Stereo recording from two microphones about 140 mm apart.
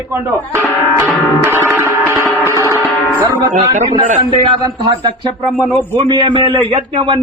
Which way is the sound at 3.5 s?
70° right (ahead or behind).